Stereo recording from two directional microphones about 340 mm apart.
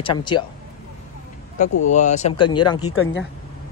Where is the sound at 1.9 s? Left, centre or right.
Left.